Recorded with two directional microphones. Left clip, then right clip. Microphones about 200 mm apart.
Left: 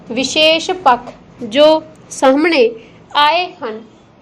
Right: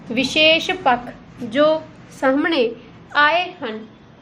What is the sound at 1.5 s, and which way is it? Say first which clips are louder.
A woman's voice: left 7 dB; 25° left (ahead or behind).